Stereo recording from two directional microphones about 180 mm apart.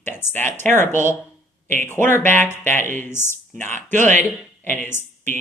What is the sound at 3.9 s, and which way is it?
Speech, 45° right (ahead or behind).